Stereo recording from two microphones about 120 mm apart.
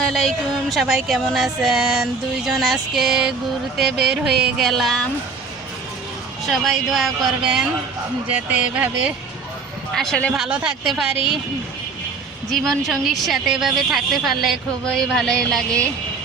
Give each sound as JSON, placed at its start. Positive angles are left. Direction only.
{"t": 0.0, "sound": "music", "side_deg": 0}
{"t": 6.5, "sound": "music", "side_deg": 0}
{"t": 8.3, "sound": "speech", "side_deg": -10}
{"t": 9.9, "sound": "speech", "side_deg": 5}
{"t": 10.3, "sound": "music", "side_deg": -5}
{"t": 12.5, "sound": "music", "side_deg": 0}